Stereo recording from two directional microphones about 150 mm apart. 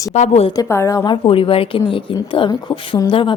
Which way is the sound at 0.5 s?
20° left (ahead or behind).